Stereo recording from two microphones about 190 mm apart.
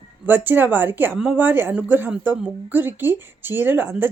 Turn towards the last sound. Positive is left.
turn(degrees=-10)  # may be behind; listen again after turning